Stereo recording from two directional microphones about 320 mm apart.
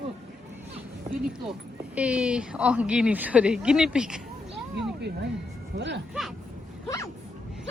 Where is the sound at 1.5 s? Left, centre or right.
Centre.